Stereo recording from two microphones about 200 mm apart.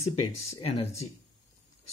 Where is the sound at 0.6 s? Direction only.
30° left (ahead or behind).